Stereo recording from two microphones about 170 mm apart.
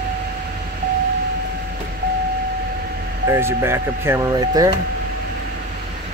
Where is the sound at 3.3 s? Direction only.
15° right (ahead or behind).